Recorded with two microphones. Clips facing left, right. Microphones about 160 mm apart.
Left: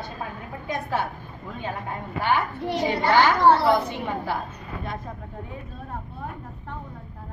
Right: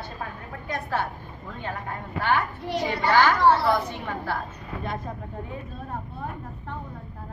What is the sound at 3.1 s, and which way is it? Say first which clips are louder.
A woman's voice: left 1 dB; 20° left (ahead or behind).